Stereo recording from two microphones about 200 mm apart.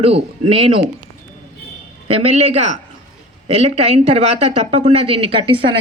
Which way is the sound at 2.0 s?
30° right (ahead or behind).